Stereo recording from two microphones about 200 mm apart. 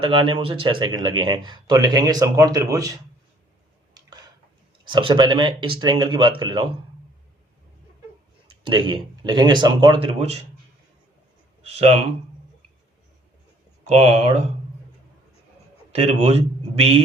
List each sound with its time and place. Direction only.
0.0 s speech: 25° right (ahead or behind)
3.9 s a sound: 20° right (ahead or behind)
4.9 s speech: 25° right (ahead or behind)
8.7 s speech: 25° right (ahead or behind)
11.7 s speech: 30° right (ahead or behind)
13.8 s speech: 35° right (ahead or behind)
16.0 s speech: 30° right (ahead or behind)